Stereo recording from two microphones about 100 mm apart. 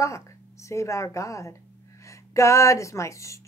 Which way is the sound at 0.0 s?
30° left (ahead or behind).